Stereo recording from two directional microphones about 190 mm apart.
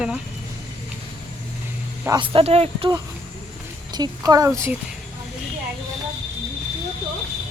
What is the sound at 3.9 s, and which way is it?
Speech, 20° right (ahead or behind).